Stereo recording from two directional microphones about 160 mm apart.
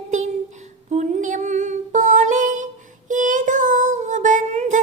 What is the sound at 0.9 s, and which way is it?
Female singing, 50° right (ahead or behind).